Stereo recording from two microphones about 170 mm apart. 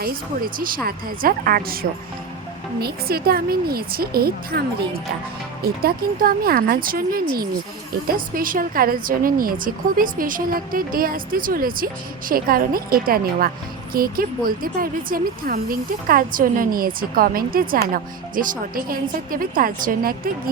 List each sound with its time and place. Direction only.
0.5 s speech: 60° right (ahead or behind)
5.6 s speech: 60° right (ahead or behind)